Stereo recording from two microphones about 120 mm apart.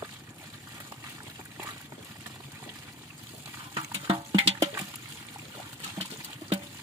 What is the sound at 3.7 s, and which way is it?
Stir, 50° right (ahead or behind).